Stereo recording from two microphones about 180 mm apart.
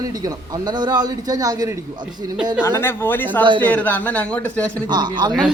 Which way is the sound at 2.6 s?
15° left (ahead or behind).